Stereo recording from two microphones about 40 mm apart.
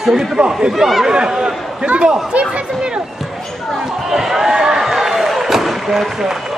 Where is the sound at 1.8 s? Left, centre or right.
Right.